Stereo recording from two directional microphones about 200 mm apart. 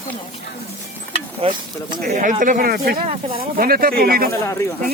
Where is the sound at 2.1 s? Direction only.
40° right (ahead or behind).